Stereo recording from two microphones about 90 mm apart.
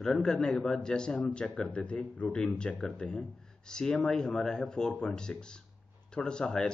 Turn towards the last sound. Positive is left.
turn(degrees=10)  # may be behind; listen again after turning